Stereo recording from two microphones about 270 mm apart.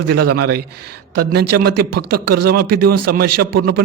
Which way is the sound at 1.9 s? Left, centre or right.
Right.